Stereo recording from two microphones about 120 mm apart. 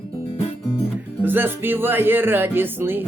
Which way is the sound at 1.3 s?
15° right (ahead or behind).